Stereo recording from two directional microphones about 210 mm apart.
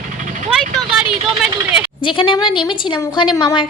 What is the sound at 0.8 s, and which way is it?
Vehicle, 5° right (ahead or behind).